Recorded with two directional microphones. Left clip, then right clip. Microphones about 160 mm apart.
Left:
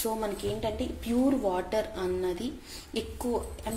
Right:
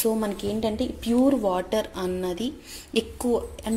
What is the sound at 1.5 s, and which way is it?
Speech, 40° right (ahead or behind).